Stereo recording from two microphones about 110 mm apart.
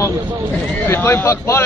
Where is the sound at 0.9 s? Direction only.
25° left (ahead or behind).